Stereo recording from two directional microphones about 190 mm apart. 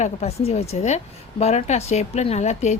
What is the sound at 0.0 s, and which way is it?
Speech, 35° left (ahead or behind).